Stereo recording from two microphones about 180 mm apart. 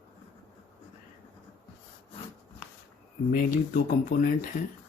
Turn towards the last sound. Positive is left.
turn(degrees=50)  # may be behind; listen again after turning